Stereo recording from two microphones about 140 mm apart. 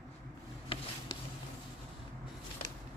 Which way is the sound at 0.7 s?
40° left (ahead or behind).